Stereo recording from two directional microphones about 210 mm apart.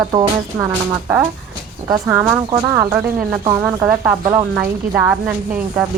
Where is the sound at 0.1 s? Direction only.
20° right (ahead or behind).